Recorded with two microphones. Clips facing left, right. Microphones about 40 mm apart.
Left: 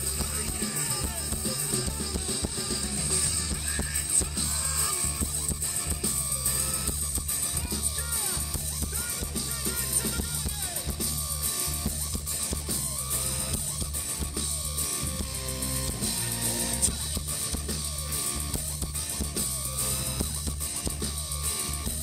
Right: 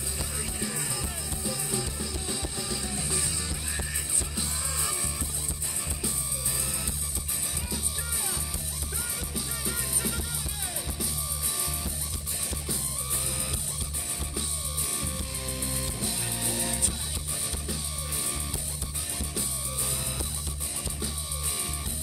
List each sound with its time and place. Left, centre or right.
0.2 s music: centre
9.3 s music: centre
15.0 s music: right